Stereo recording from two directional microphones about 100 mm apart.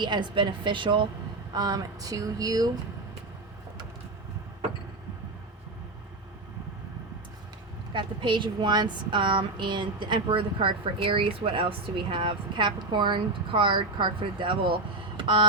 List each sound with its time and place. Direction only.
0.0 s a woman's voice: 50° right (ahead or behind)
1.5 s a sound: 40° right (ahead or behind)
7.9 s a woman's voice: 55° right (ahead or behind)